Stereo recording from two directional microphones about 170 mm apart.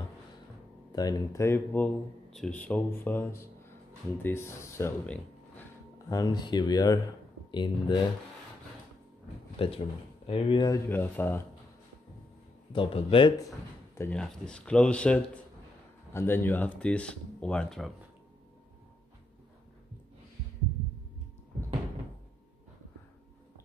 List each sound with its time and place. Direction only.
0.9 s speech: 20° left (ahead or behind)
6.0 s speech: 20° left (ahead or behind)
9.6 s speech: 35° left (ahead or behind)
10.9 s speech: 10° left (ahead or behind)
12.7 s speech: 30° left (ahead or behind)
13.9 s speech: 10° left (ahead or behind)